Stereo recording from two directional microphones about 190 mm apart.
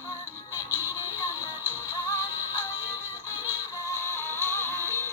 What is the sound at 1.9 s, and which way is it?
Synthetic singing, 20° left (ahead or behind).